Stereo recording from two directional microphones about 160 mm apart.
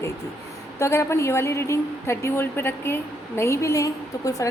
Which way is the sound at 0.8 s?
15° left (ahead or behind).